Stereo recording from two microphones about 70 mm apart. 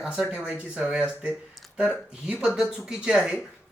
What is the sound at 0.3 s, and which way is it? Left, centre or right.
Speech, centre.